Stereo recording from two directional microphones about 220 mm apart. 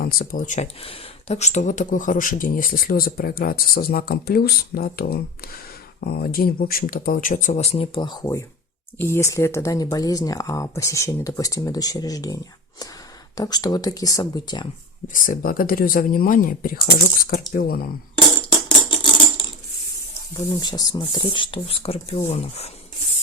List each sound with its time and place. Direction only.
0.0 s speech: 40° left (ahead or behind); by 14.7 s 20° left (ahead or behind)
15.0 s speech: 35° left (ahead or behind)
20.3 s speech: 20° left (ahead or behind)